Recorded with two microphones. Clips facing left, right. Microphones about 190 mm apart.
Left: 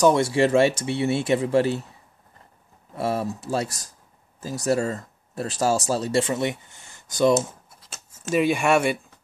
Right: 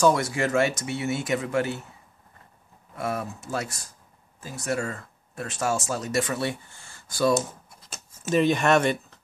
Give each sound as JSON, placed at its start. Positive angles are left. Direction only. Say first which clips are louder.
{"t": 0.0, "sound": "speech", "louder": "left 4 dB", "side_deg": 25}
{"t": 3.0, "sound": "speech", "louder": "left 5 dB", "side_deg": 30}
{"t": 7.3, "sound": "a sound", "louder": "left 3 dB", "side_deg": 0}